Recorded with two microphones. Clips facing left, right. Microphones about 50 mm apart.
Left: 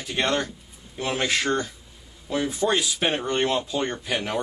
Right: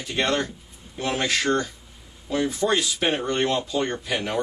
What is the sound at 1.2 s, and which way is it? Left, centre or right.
A man's voice, centre.